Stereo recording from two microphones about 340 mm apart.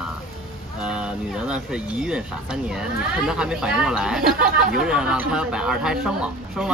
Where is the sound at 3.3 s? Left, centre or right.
Centre.